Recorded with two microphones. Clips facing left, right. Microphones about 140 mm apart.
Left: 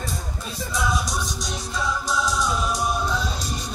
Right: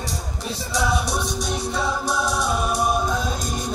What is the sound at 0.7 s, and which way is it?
Music, 70° right (ahead or behind).